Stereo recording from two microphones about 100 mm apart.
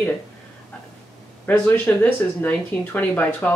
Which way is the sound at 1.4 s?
20° left (ahead or behind).